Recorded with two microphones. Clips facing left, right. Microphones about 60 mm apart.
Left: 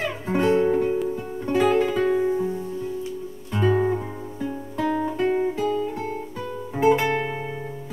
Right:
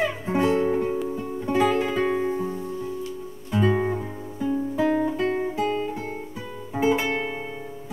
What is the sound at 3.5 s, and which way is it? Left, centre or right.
Guitar, centre.